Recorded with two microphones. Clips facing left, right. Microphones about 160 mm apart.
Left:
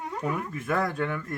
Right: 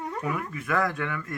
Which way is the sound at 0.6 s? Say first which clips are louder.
Even; 30° left (ahead or behind).